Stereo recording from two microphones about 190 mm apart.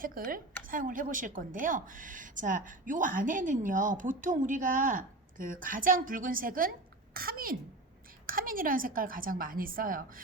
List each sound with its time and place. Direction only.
0.0 s a woman's voice: 50° right (ahead or behind)